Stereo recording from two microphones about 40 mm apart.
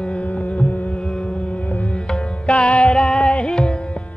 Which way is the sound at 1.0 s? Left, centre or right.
Left.